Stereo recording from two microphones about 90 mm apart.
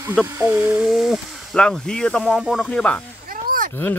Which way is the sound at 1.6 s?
10° left (ahead or behind).